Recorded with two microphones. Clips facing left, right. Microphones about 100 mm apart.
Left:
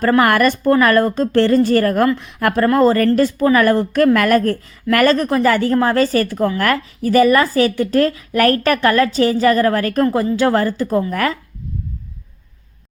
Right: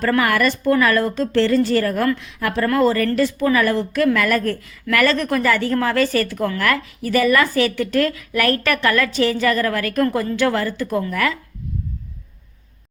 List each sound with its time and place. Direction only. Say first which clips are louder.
0.2 s a woman's voice: left 4 dB; 50° left (ahead or behind)